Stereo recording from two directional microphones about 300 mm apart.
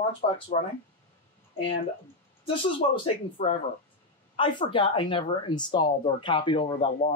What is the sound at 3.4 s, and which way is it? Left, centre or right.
Speech, centre.